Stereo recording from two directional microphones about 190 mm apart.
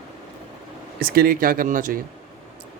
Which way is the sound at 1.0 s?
50° right (ahead or behind).